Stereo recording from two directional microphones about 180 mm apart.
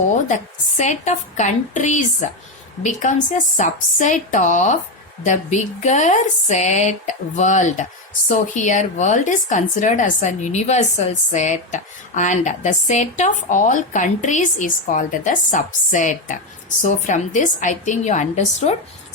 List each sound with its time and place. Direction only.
0.1 s a woman's voice: 45° left (ahead or behind)